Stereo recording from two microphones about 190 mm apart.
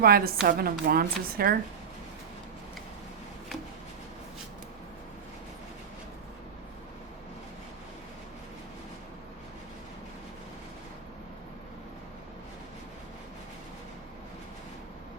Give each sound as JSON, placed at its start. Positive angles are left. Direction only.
{"t": 0.0, "sound": "speech", "side_deg": -50}